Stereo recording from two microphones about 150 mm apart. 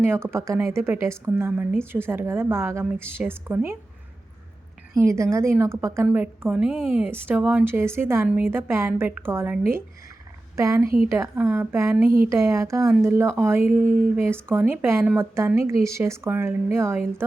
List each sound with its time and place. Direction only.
0.0 s a woman's voice: 15° right (ahead or behind)
4.9 s a woman's voice: 20° right (ahead or behind)